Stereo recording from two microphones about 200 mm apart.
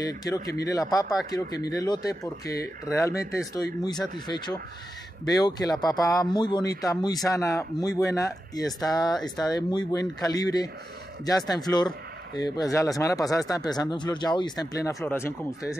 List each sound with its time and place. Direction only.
0.0 s speech: 20° left (ahead or behind)